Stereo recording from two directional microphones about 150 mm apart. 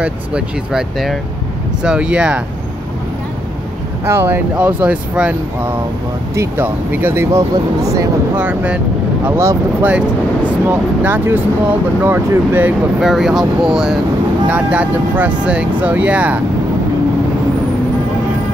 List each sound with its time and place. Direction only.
0.0 s speech: 5° right (ahead or behind)
4.0 s speech: 15° right (ahead or behind)
6.3 s speech: 15° right (ahead or behind)
8.4 s speech: 10° right (ahead or behind)